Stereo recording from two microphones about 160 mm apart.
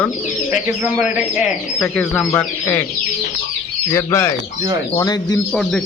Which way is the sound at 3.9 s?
15° left (ahead or behind).